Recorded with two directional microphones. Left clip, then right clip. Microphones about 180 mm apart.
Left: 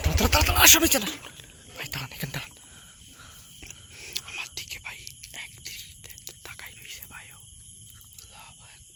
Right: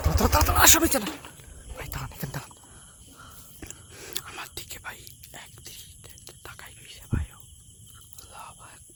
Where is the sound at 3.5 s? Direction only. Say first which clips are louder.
Even; 65° right (ahead or behind); by 7.3 s 25° right (ahead or behind).